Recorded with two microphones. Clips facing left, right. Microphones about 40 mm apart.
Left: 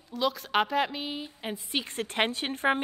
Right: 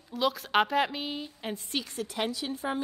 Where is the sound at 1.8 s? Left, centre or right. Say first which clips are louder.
Left 7 dB; left.